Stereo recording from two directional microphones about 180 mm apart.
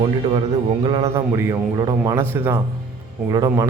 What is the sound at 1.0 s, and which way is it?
A man's voice, 15° right (ahead or behind).